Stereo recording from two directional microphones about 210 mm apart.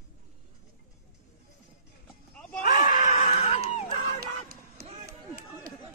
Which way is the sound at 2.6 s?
35° left (ahead or behind).